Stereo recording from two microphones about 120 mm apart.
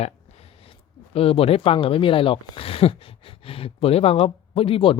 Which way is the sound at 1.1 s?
55° left (ahead or behind).